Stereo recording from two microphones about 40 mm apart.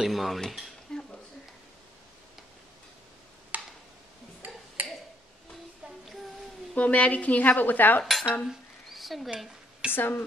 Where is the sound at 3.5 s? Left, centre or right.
Right.